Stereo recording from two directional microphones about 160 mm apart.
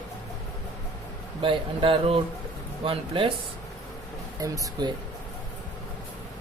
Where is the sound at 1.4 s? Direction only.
35° right (ahead or behind).